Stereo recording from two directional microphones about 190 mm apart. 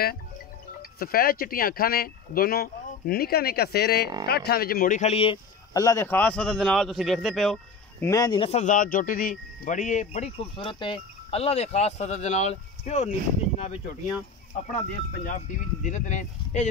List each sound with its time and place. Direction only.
0.9 s speech: 50° left (ahead or behind); by 5.4 s 30° left (ahead or behind)
5.7 s a man's voice: 20° left (ahead or behind); by 8.1 s centre (ahead or behind)
8.1 s speech: 20° left (ahead or behind)
14.8 s speech: 40° left (ahead or behind)